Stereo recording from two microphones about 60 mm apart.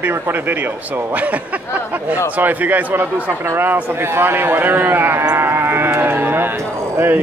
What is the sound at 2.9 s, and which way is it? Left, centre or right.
A man's voice, right.